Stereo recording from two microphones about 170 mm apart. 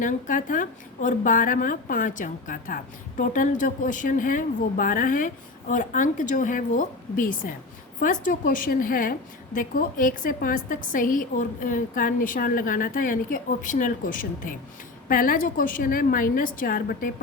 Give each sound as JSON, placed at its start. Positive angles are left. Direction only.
{"t": 0.0, "sound": "a woman's voice", "side_deg": 50}